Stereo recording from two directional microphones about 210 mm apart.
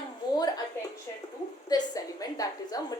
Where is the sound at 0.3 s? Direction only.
20° left (ahead or behind).